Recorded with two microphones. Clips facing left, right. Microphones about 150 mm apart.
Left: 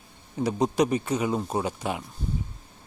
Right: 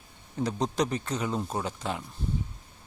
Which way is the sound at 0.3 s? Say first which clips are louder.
Left 5 dB; 10° left (ahead or behind).